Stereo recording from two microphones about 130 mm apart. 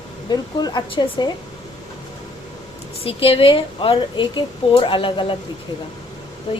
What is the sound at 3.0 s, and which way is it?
A woman's voice, 45° left (ahead or behind).